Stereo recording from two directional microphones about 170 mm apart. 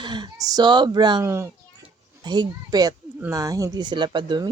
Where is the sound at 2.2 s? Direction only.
25° right (ahead or behind).